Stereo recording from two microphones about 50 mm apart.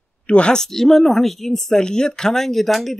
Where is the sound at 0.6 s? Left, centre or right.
Centre.